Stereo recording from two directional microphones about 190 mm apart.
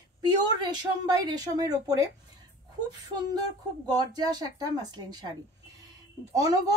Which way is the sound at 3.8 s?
20° right (ahead or behind).